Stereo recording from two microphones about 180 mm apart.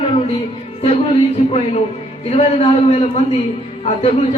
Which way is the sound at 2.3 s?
35° left (ahead or behind).